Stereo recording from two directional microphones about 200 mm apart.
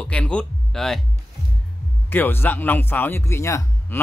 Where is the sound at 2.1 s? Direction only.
10° left (ahead or behind).